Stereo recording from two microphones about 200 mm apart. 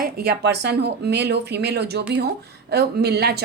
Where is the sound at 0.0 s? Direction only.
50° right (ahead or behind).